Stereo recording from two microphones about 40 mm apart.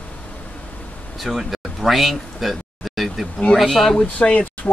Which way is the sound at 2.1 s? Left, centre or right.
Centre.